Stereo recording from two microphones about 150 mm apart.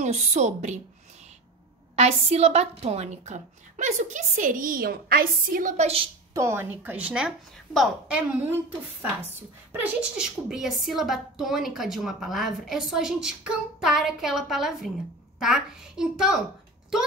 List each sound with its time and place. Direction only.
0.0 s a woman's voice: 50° right (ahead or behind)
2.0 s a woman's voice: 45° right (ahead or behind)
6.3 s speech: 20° right (ahead or behind); by 8.2 s centre (ahead or behind)
9.7 s a woman's voice: 10° right (ahead or behind)